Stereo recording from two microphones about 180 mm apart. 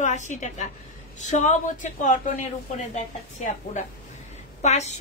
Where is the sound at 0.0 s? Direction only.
40° left (ahead or behind).